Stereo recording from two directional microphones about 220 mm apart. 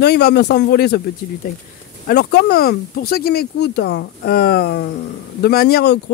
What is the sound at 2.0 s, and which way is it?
Speech, 45° left (ahead or behind).